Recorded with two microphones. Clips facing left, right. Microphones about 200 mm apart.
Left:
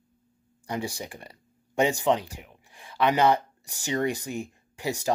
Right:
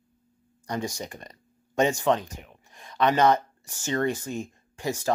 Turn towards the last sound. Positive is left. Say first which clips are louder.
# right 1 dB
turn(degrees=15)  # may be behind; listen again after turning